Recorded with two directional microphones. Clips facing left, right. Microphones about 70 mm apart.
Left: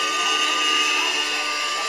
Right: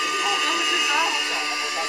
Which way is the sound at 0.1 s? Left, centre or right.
Right.